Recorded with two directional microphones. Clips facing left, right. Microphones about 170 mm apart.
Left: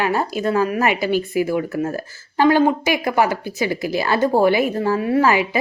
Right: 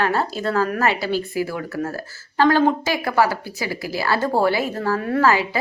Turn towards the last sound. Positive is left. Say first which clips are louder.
# left 2 dB
turn(degrees=15)  # may be behind; listen again after turning